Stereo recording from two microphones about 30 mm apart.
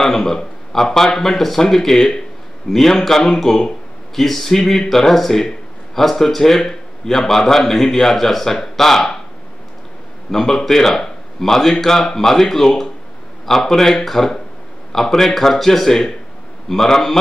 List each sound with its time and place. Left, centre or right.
0.0 s speech: centre
10.3 s a man's voice: centre